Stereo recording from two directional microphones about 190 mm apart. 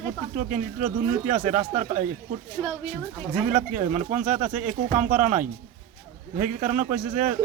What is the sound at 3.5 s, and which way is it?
Speech, 40° right (ahead or behind).